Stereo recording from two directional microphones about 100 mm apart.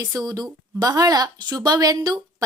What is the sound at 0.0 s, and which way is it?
Speech, 35° right (ahead or behind).